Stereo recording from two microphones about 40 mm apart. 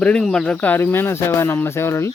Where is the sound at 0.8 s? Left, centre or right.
Left.